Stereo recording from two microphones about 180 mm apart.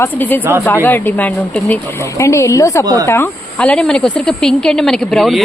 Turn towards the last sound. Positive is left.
turn(degrees=0)  # may be behind; listen again after turning